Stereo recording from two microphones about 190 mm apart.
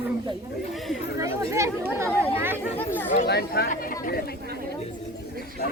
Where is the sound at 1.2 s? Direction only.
15° right (ahead or behind).